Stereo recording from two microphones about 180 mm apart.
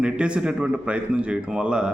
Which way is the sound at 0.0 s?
5° right (ahead or behind).